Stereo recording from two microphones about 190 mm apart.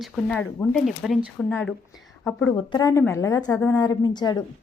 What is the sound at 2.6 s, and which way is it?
A woman's voice, 25° left (ahead or behind).